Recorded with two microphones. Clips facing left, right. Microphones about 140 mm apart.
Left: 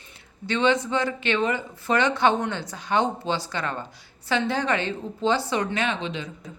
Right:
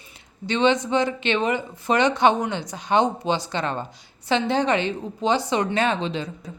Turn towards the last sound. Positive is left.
turn(degrees=-35)  # may be behind; listen again after turning